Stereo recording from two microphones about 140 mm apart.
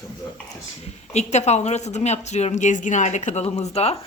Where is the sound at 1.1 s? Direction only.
55° left (ahead or behind).